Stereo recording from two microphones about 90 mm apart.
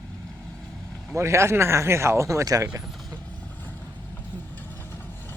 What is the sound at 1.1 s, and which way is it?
Speech, 30° right (ahead or behind).